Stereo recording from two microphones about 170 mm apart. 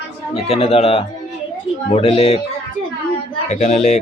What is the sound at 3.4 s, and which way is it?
Speech, 45° left (ahead or behind).